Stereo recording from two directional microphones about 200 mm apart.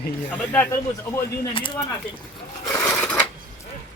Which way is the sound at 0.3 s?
5° left (ahead or behind).